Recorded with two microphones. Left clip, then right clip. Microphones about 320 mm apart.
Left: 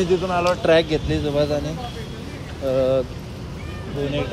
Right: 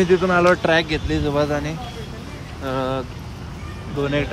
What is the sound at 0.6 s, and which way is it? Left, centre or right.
Speech, centre.